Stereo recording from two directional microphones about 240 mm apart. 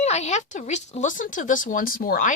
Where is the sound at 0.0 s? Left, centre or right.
Left.